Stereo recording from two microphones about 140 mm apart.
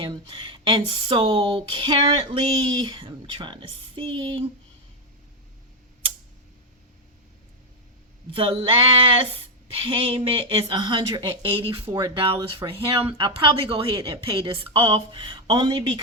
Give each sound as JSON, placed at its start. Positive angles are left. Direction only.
{"t": 0.0, "sound": "speech", "side_deg": -35}
{"t": 8.3, "sound": "speech", "side_deg": -40}